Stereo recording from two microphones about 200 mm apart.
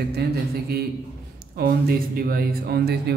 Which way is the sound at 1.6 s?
50° right (ahead or behind).